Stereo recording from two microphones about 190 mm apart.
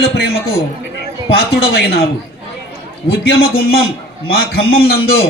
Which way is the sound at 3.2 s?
55° left (ahead or behind).